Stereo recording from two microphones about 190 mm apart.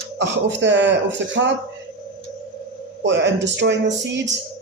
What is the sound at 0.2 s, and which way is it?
Speech, 70° right (ahead or behind).